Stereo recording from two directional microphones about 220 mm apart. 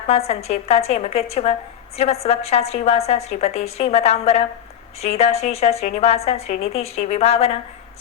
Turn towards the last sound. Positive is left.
turn(degrees=30)  # may be behind; listen again after turning